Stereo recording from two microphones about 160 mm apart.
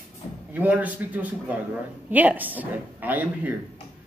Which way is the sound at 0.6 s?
10° right (ahead or behind).